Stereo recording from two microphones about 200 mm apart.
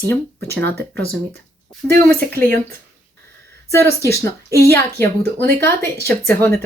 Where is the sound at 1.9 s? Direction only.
50° right (ahead or behind).